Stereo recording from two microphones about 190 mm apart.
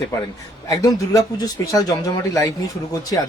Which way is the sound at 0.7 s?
20° left (ahead or behind).